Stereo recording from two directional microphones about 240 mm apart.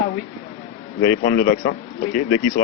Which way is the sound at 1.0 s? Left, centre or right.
Left.